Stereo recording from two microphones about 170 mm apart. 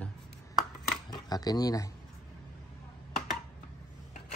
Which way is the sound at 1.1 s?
20° left (ahead or behind).